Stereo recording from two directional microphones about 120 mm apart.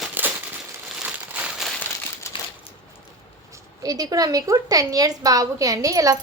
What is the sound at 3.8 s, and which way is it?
A woman's voice, 30° right (ahead or behind).